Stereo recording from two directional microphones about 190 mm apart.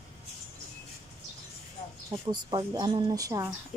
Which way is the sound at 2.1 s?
25° right (ahead or behind).